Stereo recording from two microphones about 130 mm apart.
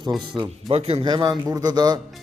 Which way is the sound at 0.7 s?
50° right (ahead or behind).